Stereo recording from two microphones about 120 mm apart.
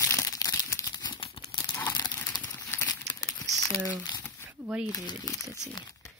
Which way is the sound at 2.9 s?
30° left (ahead or behind).